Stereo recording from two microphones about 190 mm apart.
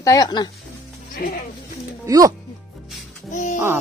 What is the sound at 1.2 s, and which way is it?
Speech, 50° left (ahead or behind).